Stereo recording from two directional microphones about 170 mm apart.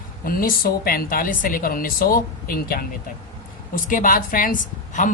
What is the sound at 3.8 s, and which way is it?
Speech, 50° left (ahead or behind).